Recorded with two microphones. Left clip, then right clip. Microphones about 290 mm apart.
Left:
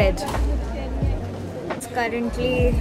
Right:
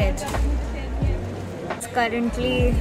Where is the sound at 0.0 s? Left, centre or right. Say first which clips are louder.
Left 5 dB; centre.